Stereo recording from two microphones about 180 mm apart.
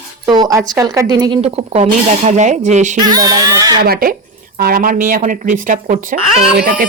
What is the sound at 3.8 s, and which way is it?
Speech, 55° right (ahead or behind).